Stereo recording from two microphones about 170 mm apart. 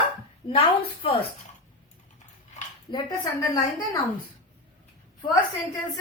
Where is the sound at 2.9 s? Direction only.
30° left (ahead or behind).